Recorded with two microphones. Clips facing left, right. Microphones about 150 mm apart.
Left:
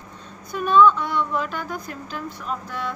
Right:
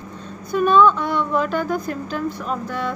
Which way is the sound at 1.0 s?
50° right (ahead or behind).